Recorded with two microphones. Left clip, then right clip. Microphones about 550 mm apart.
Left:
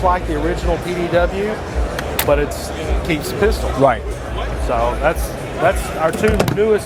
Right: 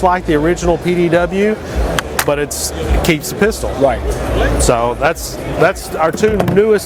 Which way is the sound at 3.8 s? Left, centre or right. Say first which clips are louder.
Right 1 dB; left.